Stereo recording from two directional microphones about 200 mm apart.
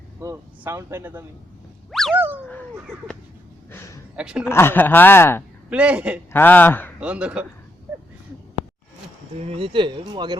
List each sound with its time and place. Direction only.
0.2 s speech: 15° right (ahead or behind)
1.9 s boing: centre (ahead or behind)
2.1 s speech: 10° right (ahead or behind)
3.7 s a sound: 10° left (ahead or behind)
4.1 s speech: 5° right (ahead or behind)
4.4 s speech: 10° left (ahead or behind)
5.7 s speech: 5° right (ahead or behind)
6.3 s speech: 10° left (ahead or behind)
7.0 s speech: 5° right (ahead or behind)
9.4 s speech: 30° right (ahead or behind)